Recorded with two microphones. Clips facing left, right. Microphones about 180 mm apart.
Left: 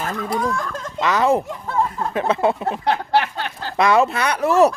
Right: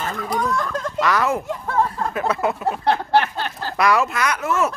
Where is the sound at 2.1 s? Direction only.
25° left (ahead or behind).